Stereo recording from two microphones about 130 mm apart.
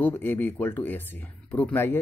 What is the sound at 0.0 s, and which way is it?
Speech, 15° left (ahead or behind).